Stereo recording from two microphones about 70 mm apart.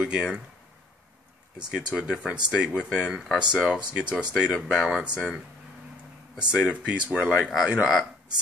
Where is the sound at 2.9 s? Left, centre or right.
Centre.